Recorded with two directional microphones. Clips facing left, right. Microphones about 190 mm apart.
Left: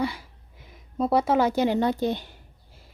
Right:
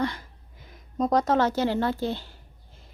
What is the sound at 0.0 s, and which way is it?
A woman's voice, 5° left (ahead or behind).